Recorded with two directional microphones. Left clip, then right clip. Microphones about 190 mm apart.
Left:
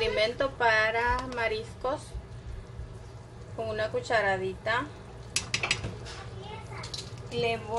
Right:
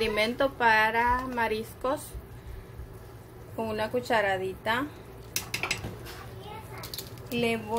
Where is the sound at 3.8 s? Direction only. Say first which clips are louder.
Right 1 dB; 30° right (ahead or behind).